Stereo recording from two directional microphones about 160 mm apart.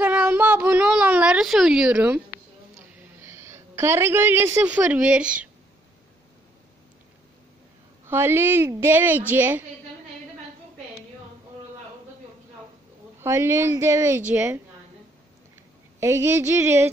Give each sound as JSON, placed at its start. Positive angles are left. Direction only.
{"t": 0.0, "sound": "a sound", "side_deg": -10}
{"t": 2.0, "sound": "a woman's voice", "side_deg": -10}
{"t": 8.1, "sound": "a woman's voice", "side_deg": -15}
{"t": 13.2, "sound": "a woman's voice", "side_deg": -15}
{"t": 16.0, "sound": "a woman's voice", "side_deg": -20}